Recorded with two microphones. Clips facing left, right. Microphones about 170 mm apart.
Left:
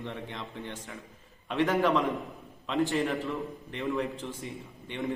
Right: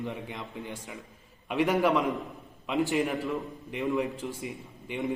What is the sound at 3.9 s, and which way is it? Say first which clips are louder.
A man's voice: right 2 dB; 10° right (ahead or behind).